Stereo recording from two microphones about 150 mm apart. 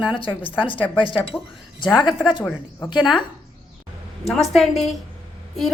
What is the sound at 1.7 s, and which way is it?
Speech, 30° left (ahead or behind).